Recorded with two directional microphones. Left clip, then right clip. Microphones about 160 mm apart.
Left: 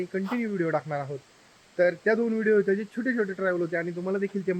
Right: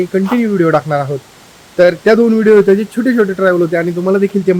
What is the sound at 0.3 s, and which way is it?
Speech, 20° right (ahead or behind).